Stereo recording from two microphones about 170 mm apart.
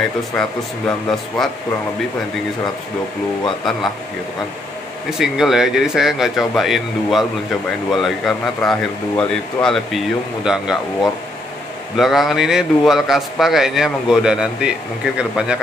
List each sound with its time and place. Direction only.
0.4 s a man's voice: 5° left (ahead or behind)
5.2 s a man's voice: centre (ahead or behind)